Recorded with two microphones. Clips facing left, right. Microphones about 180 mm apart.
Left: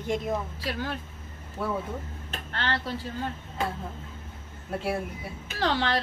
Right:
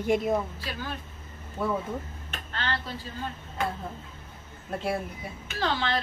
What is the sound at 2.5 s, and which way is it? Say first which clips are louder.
Speech: left 2 dB; 70° left (ahead or behind).